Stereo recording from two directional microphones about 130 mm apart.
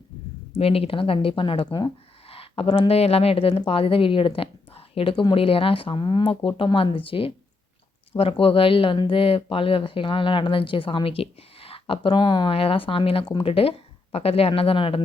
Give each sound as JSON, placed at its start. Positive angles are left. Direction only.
{"t": 0.5, "sound": "a woman's voice", "side_deg": 45}